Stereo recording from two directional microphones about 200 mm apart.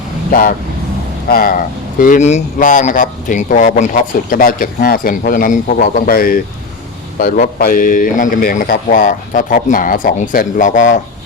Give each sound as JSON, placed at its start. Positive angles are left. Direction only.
{"t": 0.3, "sound": "speech", "side_deg": 45}